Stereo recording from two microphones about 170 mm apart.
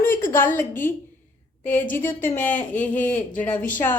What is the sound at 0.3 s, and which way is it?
A woman's voice, 10° left (ahead or behind).